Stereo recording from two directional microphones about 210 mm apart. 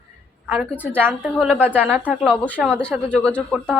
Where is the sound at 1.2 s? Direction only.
Centre (ahead or behind).